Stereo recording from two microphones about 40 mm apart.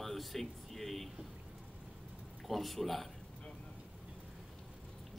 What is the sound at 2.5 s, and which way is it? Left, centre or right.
Speech, centre.